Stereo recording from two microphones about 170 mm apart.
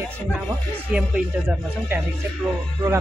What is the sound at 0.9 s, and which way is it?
Speech, 5° right (ahead or behind).